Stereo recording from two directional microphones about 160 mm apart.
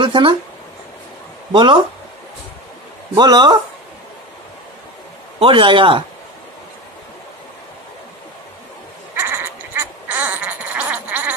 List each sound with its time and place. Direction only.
0.0 s speech: 30° right (ahead or behind)
1.5 s speech: 30° right (ahead or behind)
3.2 s speech: 25° right (ahead or behind)
5.4 s a man's voice: 30° right (ahead or behind)
9.1 s a sound: 15° right (ahead or behind)